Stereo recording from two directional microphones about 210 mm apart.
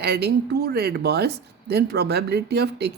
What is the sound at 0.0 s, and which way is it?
Speech, 50° right (ahead or behind).